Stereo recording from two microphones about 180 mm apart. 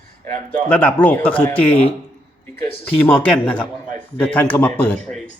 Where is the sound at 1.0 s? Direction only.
5° left (ahead or behind).